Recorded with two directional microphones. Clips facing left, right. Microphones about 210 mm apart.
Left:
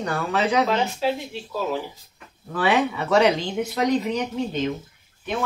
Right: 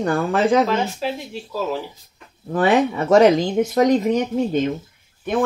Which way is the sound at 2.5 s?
45° right (ahead or behind).